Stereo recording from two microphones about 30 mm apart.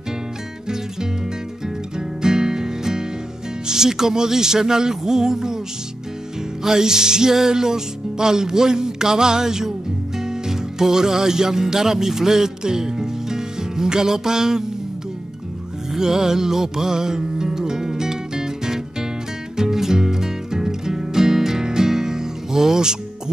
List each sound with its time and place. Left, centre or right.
2.0 s music: right
6.6 s music: centre
15.9 s music: centre